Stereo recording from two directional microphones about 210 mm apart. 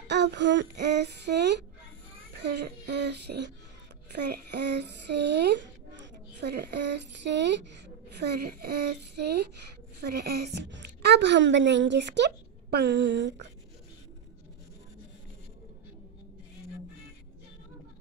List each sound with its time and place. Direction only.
0.1 s a woman's voice: 55° right (ahead or behind)